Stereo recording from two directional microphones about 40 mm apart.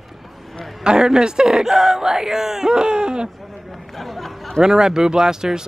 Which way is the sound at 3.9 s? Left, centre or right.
Centre.